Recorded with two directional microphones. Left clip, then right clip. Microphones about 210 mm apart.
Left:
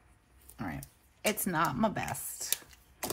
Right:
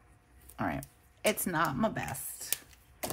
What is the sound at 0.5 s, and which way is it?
Speech, 25° right (ahead or behind).